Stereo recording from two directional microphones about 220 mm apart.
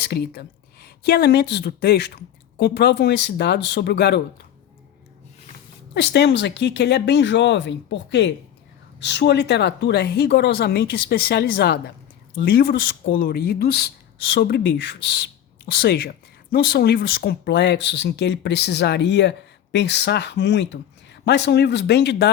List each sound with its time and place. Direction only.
0.0 s a woman's voice: 45° left (ahead or behind)
5.9 s a woman's voice: 50° left (ahead or behind)